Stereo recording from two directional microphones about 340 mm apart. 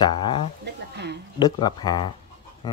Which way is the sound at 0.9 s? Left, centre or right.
Right.